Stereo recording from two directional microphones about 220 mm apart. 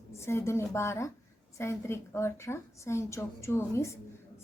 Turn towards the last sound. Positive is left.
turn(degrees=10)  # may be behind; listen again after turning